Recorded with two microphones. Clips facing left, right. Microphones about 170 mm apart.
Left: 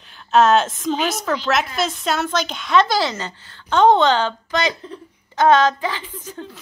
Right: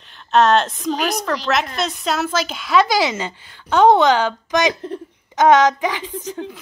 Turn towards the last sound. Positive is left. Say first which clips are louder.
# right 6 dB
turn(degrees=-10)  # may be behind; listen again after turning